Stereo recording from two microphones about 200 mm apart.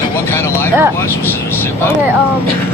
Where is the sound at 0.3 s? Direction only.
10° left (ahead or behind).